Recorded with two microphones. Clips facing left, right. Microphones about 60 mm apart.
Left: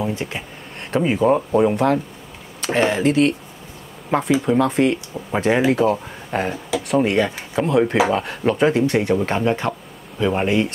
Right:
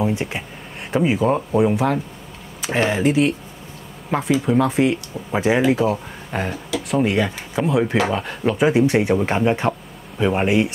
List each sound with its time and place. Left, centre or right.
0.0 s speech: centre
0.9 s speech: centre
4.4 s speech: centre
8.7 s speech: centre